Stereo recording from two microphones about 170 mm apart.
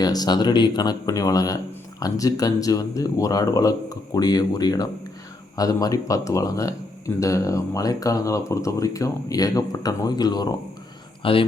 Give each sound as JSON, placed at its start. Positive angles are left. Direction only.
{"t": 0.0, "sound": "speech", "side_deg": 20}